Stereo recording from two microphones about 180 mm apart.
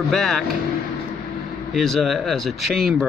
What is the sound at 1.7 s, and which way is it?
Speech, centre (ahead or behind).